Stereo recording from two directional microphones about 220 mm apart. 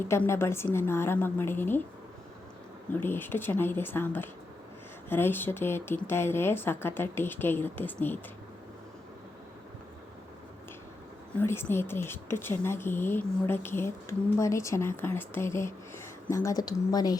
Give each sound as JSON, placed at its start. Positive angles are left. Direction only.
{"t": 0.0, "sound": "speech", "side_deg": 10}
{"t": 2.9, "sound": "speech", "side_deg": 10}
{"t": 11.3, "sound": "speech", "side_deg": 10}